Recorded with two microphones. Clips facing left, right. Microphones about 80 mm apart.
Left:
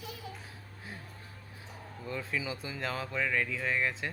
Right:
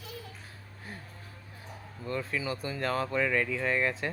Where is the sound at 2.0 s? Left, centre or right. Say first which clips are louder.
Right 3 dB; centre.